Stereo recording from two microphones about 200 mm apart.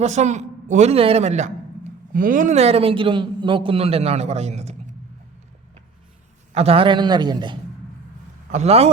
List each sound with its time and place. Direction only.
0.0 s a man's voice: 35° right (ahead or behind)
6.5 s a man's voice: 30° right (ahead or behind)